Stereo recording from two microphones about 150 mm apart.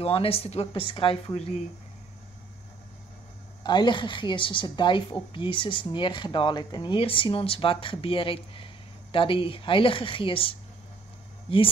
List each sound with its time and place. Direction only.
0.0 s speech: 40° left (ahead or behind)
3.6 s speech: 30° left (ahead or behind)